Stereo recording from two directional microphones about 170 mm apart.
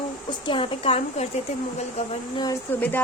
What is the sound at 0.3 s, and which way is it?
Speech, 30° left (ahead or behind).